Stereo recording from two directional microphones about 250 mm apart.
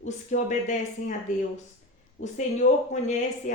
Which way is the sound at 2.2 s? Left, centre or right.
Left.